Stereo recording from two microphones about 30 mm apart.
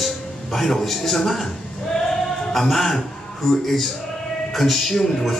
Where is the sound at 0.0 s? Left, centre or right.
Centre.